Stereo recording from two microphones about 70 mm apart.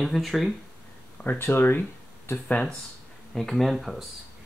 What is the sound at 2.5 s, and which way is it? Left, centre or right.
Speech, centre.